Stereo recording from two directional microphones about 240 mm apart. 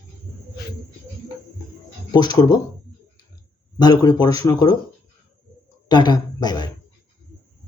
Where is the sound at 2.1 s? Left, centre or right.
Centre.